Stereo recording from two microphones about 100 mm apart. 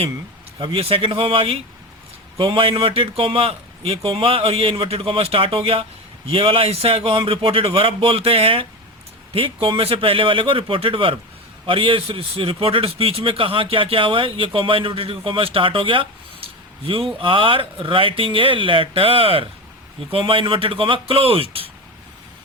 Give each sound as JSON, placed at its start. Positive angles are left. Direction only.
{"t": 0.6, "sound": "a man's voice", "side_deg": -65}